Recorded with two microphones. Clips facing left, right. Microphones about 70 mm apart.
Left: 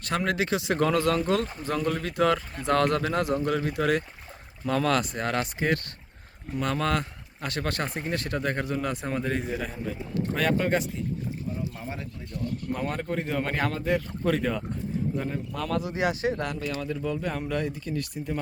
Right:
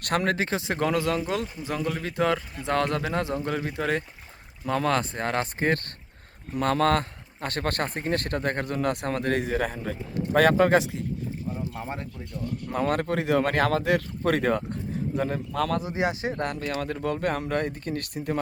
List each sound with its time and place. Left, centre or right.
0.0 s speech: right
0.3 s speech: right; by 2.0 s centre
2.0 s speech: right
10.3 s speech: right
11.7 s speech: right
12.7 s speech: right
15.1 s speech: right
15.8 s speech: right
16.4 s speech: right